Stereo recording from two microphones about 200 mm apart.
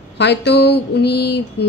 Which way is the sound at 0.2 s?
60° left (ahead or behind).